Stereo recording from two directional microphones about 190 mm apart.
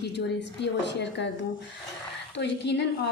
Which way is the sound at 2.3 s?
65° left (ahead or behind).